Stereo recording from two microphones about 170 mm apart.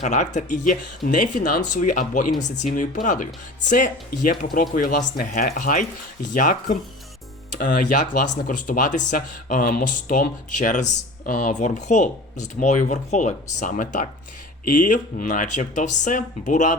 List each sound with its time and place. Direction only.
0.0 s speech: 45° left (ahead or behind)